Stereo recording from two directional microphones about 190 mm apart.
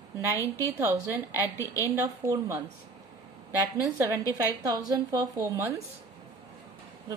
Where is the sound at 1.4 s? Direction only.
15° left (ahead or behind).